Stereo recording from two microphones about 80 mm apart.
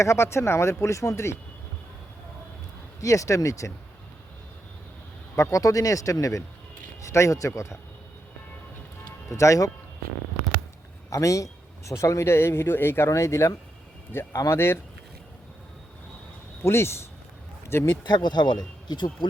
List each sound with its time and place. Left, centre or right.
0.0 s speech: left
3.0 s speech: left
5.4 s speech: left
9.3 s speech: left
11.1 s speech: left
16.6 s speech: left
18.0 s speech: left